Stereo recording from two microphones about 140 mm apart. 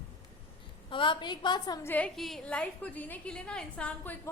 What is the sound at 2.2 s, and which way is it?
A woman's voice, centre (ahead or behind).